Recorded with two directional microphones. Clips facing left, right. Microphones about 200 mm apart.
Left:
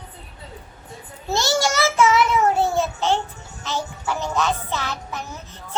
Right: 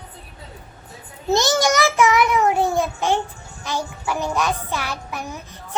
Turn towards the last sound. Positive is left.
turn(degrees=-10)  # may be behind; listen again after turning